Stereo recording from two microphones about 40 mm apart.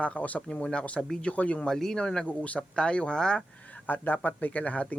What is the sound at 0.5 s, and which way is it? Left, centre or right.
Speech, left.